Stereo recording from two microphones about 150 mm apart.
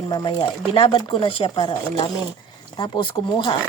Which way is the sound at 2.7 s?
35° left (ahead or behind).